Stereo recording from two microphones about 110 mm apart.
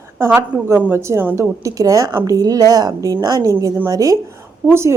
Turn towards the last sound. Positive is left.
turn(degrees=-25)  # may be behind; listen again after turning